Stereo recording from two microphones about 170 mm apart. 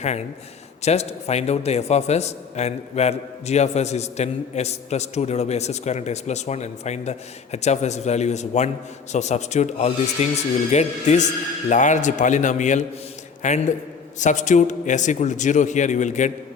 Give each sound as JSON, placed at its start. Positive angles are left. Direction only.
{"t": 0.0, "sound": "a man's voice", "side_deg": 40}